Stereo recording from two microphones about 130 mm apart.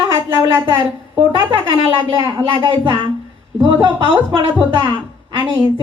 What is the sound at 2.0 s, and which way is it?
Speech, 30° right (ahead or behind).